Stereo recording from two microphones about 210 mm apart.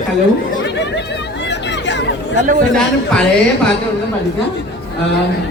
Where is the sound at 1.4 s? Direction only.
55° left (ahead or behind).